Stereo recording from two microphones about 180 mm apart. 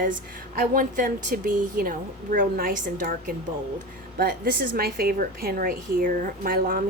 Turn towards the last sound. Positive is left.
turn(degrees=-50)  # may be behind; listen again after turning